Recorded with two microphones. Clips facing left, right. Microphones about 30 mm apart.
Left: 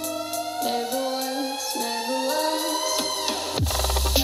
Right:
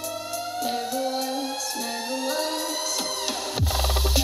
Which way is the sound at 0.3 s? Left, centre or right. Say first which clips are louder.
Left 2 dB; left.